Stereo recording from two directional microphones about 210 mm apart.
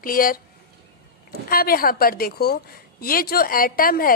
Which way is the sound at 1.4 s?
45° left (ahead or behind).